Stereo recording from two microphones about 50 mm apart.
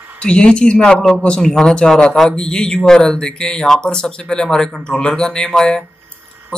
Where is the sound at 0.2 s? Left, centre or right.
Centre.